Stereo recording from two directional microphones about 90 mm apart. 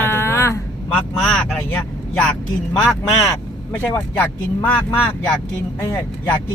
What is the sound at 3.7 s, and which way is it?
Speech, 30° left (ahead or behind).